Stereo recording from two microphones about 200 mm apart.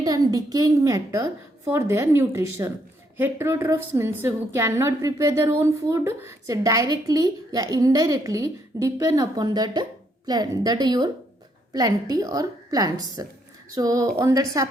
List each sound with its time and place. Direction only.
0.0 s a woman's voice: 20° right (ahead or behind)